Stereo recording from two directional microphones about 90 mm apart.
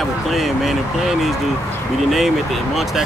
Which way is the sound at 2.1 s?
Centre (ahead or behind).